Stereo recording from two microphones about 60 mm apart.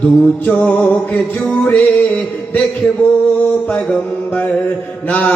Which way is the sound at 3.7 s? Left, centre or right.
Left.